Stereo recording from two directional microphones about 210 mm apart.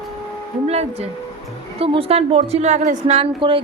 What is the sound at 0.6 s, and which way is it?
A woman's voice, 30° right (ahead or behind).